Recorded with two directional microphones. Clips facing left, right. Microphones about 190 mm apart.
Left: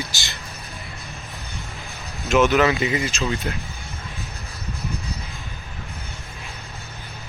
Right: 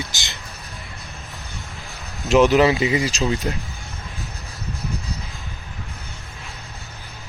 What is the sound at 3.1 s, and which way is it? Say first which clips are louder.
Speech: right 3 dB; 35° right (ahead or behind).